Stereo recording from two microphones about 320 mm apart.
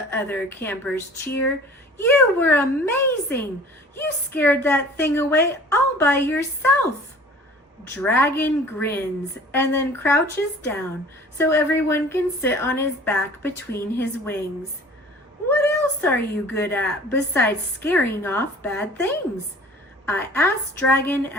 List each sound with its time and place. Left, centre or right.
0.1 s a woman's voice: centre
7.9 s a woman's voice: centre
11.3 s a woman's voice: centre
15.4 s a woman's voice: centre